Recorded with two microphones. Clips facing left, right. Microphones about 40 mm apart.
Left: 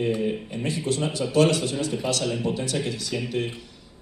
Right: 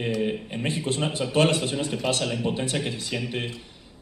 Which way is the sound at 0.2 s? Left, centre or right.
Right.